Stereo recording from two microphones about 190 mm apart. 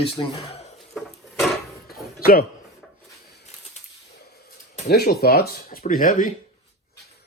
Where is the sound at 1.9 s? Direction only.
50° left (ahead or behind).